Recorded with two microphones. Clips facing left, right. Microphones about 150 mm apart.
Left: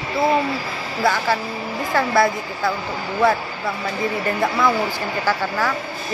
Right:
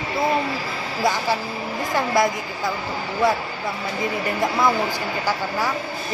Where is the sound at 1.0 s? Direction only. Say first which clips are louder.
Left 2 dB; 15° right (ahead or behind).